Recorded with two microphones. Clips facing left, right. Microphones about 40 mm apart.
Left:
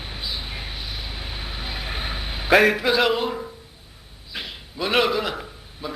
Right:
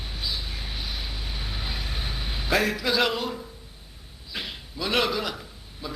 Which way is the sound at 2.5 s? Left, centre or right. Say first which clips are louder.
Left 8 dB; left.